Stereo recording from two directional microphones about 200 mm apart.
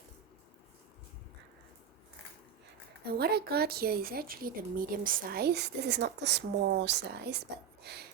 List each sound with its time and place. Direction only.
3.1 s a woman's voice: 50° right (ahead or behind)